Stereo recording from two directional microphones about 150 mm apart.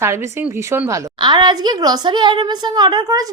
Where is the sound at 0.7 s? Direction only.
20° right (ahead or behind).